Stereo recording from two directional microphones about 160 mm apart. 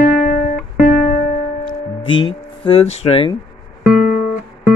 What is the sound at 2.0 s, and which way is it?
Speech, 30° left (ahead or behind).